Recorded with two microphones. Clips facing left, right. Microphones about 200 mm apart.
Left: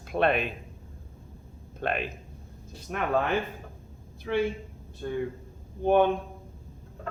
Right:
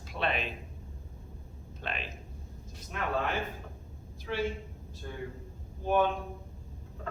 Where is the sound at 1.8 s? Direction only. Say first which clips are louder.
Left 9 dB; 55° left (ahead or behind).